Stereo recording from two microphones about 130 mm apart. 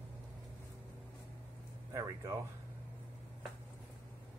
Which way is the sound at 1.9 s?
25° right (ahead or behind).